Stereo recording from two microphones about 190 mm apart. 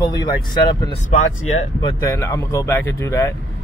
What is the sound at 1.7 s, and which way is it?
Speech, 20° left (ahead or behind).